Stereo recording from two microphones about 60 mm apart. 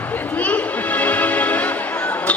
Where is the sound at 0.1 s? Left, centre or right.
Left.